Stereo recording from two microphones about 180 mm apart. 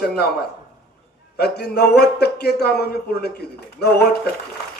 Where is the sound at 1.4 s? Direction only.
65° left (ahead or behind).